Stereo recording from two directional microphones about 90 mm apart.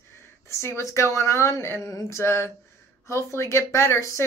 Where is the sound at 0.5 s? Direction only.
30° left (ahead or behind).